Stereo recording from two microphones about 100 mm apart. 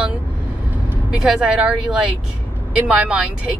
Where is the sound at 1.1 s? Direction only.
5° right (ahead or behind).